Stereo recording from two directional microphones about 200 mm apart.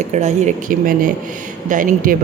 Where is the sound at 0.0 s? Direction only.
35° right (ahead or behind).